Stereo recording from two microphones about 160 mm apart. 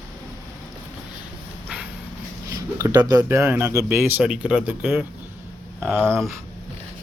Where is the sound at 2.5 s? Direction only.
20° right (ahead or behind).